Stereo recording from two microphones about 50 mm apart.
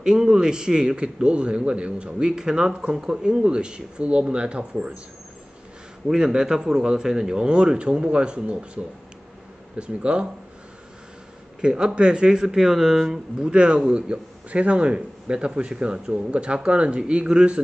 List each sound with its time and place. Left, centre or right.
0.0 s a man's voice: centre
6.0 s a man's voice: centre
11.6 s a man's voice: centre